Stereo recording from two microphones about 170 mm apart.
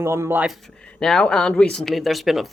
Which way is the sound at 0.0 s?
15° right (ahead or behind).